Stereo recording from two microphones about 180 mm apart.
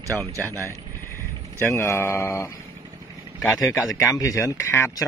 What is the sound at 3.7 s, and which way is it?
Speech, 15° left (ahead or behind).